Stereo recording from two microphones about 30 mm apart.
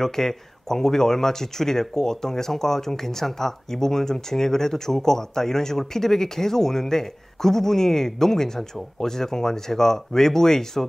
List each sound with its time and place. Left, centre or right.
0.0 s speech: centre